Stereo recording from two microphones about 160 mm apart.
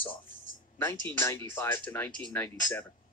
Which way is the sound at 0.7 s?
15° left (ahead or behind).